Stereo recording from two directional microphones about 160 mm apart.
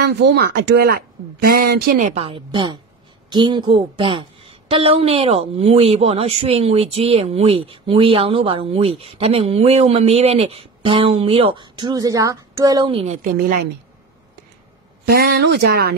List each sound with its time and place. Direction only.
0.0 s speech: 75° right (ahead or behind)
2.0 s a woman's voice: 35° right (ahead or behind)
13.0 s a woman's voice: 60° right (ahead or behind)
15.0 s speech: 70° right (ahead or behind)